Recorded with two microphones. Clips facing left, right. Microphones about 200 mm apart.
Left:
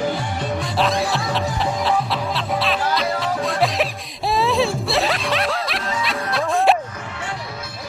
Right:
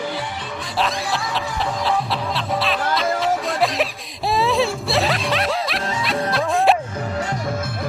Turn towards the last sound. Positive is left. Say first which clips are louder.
# even
turn(degrees=0)  # may be behind; listen again after turning